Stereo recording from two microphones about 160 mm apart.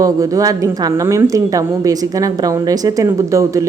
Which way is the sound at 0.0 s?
20° right (ahead or behind).